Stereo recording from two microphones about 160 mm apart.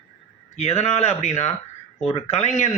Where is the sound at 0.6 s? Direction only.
40° left (ahead or behind).